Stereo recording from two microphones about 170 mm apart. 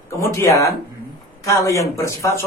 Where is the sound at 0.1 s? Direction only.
15° left (ahead or behind).